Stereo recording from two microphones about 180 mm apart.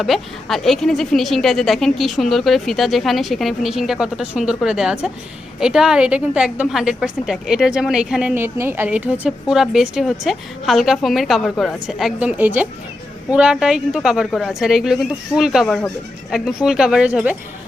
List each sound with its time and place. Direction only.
0.0 s a woman's voice: centre (ahead or behind)